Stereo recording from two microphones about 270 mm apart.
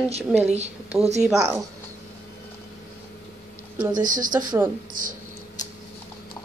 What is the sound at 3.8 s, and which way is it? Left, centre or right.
Speech, centre.